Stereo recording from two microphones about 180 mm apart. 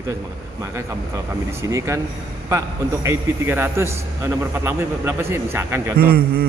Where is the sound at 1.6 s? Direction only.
15° right (ahead or behind).